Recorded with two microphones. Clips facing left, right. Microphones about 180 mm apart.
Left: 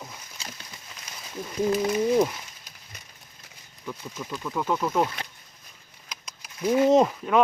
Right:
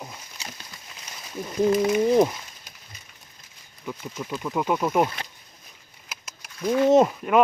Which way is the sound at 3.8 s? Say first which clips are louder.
Right 2 dB; 15° right (ahead or behind).